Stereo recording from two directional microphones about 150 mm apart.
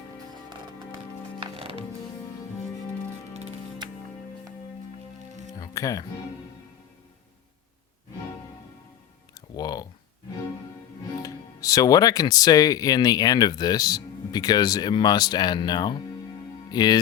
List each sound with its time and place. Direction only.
1.4 s music: 40° right (ahead or behind)
5.5 s music: 25° left (ahead or behind)
9.6 s a sound: 25° left (ahead or behind)
11.2 s speech: 25° left (ahead or behind)